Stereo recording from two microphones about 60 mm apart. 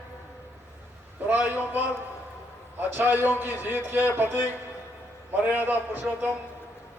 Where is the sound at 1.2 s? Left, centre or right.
Right.